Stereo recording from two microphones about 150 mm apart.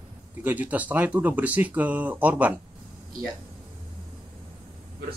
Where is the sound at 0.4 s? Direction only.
10° right (ahead or behind).